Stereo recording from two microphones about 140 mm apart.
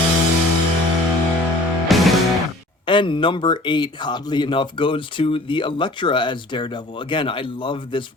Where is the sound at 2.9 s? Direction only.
35° left (ahead or behind).